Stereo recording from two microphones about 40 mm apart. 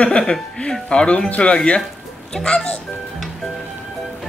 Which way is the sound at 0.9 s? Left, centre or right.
Left.